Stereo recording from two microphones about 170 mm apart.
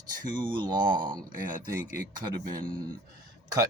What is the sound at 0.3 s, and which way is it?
Speech, 25° right (ahead or behind).